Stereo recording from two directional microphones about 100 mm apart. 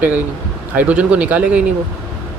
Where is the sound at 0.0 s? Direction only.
15° right (ahead or behind).